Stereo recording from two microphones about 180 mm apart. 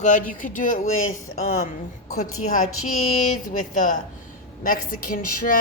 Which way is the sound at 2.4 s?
45° left (ahead or behind).